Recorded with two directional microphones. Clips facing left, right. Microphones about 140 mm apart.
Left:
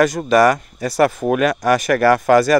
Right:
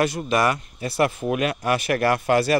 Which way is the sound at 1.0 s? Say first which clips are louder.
Left 6 dB; 40° left (ahead or behind).